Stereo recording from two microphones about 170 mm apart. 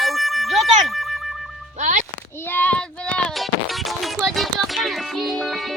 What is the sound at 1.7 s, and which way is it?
Speech, 45° right (ahead or behind).